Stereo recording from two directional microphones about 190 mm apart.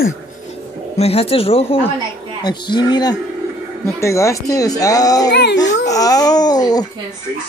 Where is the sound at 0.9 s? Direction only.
30° left (ahead or behind).